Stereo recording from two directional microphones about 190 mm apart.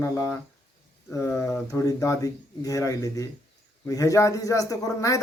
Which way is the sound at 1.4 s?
15° left (ahead or behind).